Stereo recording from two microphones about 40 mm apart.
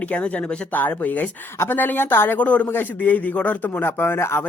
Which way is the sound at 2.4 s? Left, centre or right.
Left.